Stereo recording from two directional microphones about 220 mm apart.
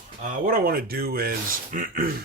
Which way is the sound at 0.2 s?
40° right (ahead or behind).